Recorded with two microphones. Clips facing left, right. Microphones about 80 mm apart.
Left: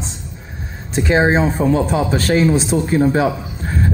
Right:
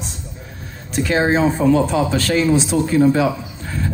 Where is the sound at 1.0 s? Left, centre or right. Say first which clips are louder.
Left 3 dB; centre.